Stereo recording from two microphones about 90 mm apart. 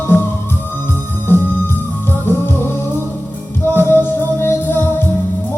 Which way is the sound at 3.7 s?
25° left (ahead or behind).